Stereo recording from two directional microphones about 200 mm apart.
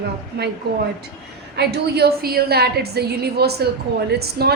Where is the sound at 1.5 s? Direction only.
55° right (ahead or behind).